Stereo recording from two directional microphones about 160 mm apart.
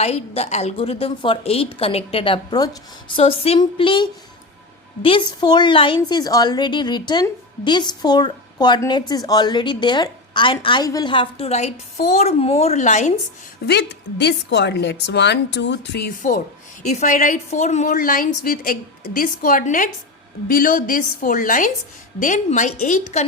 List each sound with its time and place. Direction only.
0.0 s a woman's voice: 40° left (ahead or behind)
13.7 s a woman's voice: 90° left
16.8 s a woman's voice: 50° left (ahead or behind)